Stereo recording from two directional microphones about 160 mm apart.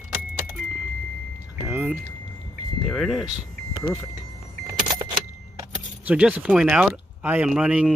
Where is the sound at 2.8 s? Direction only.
Centre (ahead or behind).